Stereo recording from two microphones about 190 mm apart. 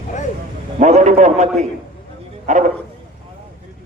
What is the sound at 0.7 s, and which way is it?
A man's voice, 35° right (ahead or behind).